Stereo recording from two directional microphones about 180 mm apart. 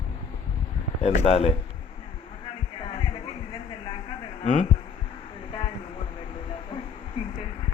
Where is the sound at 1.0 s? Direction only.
40° left (ahead or behind).